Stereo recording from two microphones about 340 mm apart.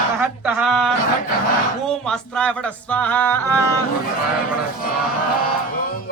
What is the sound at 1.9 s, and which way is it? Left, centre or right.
Music, centre.